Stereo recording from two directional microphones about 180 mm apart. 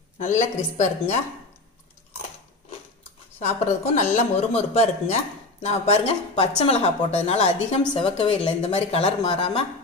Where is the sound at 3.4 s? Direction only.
40° left (ahead or behind).